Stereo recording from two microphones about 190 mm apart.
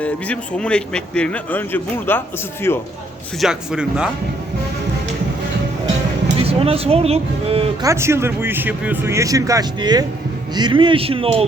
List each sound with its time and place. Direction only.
0.0 s a man's voice: 5° left (ahead or behind)
3.4 s speech: 5° right (ahead or behind)
6.4 s speech: 30° right (ahead or behind)
7.9 s a man's voice: 15° right (ahead or behind); by 11.4 s 30° right (ahead or behind)